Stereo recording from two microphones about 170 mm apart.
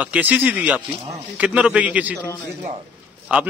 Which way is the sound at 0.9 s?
35° right (ahead or behind).